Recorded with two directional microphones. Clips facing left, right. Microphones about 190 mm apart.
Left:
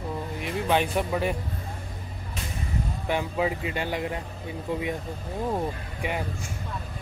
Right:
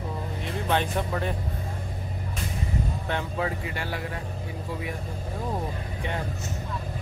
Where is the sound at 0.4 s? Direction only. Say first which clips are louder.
Left 2 dB; 10° left (ahead or behind).